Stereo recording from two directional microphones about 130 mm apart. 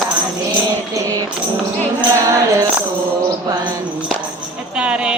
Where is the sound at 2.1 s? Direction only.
25° right (ahead or behind).